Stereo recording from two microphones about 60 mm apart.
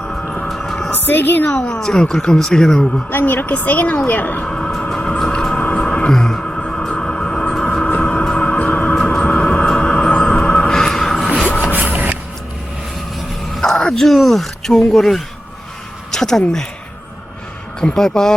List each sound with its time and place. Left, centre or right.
0.0 s vehicle: centre
0.4 s vehicle: centre
0.9 s speech: left
1.5 s speech: centre
3.1 s a woman's voice: left
4.4 s music: centre
5.5 s a sound: centre
8.0 s music: centre
13.5 s speech: centre
17.7 s speech: centre